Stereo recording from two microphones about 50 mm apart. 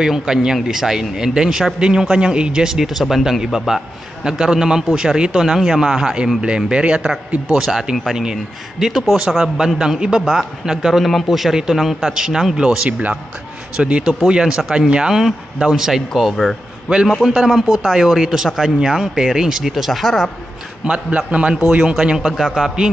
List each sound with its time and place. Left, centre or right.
0.0 s speech: centre
5.4 s speech: centre
6.4 s speech: right
7.5 s speech: centre
20.8 s speech: right